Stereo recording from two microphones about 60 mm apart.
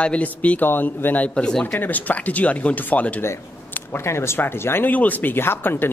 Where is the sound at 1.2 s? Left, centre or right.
Centre.